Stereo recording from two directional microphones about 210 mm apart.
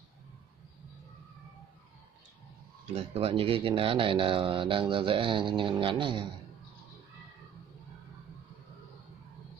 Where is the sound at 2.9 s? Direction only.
30° right (ahead or behind).